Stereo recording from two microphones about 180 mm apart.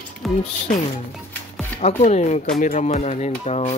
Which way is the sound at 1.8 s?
40° left (ahead or behind).